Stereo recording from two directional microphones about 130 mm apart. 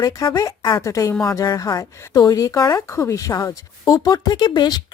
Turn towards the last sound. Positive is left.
turn(degrees=35)  # may be behind; listen again after turning